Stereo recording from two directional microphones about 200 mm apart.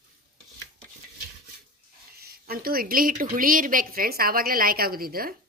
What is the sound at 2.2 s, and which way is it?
A woman's voice, 50° right (ahead or behind).